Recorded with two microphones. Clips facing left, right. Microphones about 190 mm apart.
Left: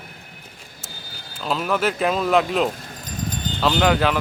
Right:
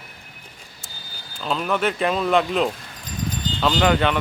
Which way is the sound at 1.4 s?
Centre (ahead or behind).